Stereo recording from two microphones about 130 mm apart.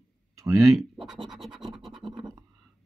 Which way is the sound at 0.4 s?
25° right (ahead or behind).